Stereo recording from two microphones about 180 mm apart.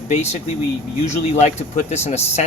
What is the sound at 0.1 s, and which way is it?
Speech, 40° left (ahead or behind).